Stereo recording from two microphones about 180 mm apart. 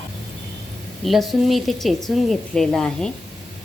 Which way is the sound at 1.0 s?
Centre (ahead or behind).